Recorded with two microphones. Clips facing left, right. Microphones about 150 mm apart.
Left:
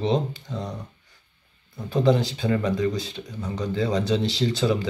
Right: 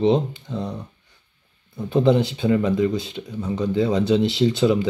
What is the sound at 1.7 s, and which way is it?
A man's voice, 20° right (ahead or behind).